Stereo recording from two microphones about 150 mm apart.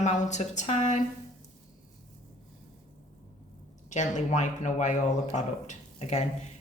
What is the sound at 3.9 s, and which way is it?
A woman's voice, 50° left (ahead or behind).